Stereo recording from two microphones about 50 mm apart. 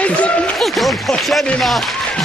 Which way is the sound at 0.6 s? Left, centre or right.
Centre.